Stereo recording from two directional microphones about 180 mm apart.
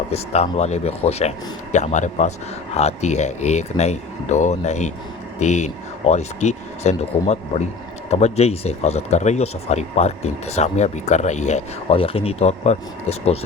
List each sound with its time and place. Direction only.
0.1 s speech: 35° left (ahead or behind)